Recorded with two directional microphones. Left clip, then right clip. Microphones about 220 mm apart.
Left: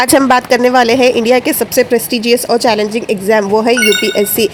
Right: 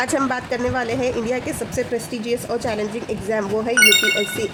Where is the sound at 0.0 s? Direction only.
35° left (ahead or behind).